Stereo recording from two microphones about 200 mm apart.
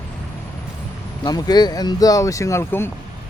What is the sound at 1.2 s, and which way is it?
Speech, 20° left (ahead or behind).